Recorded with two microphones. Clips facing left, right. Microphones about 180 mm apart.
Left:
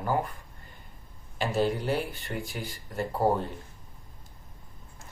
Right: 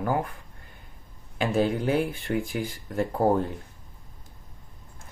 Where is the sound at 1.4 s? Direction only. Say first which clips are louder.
Right 3 dB; 55° right (ahead or behind).